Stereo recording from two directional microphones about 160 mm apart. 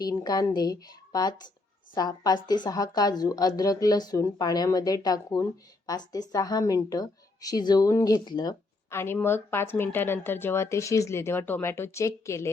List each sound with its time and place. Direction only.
0.0 s a woman's voice: 25° left (ahead or behind)
8.9 s a woman's voice: 15° left (ahead or behind)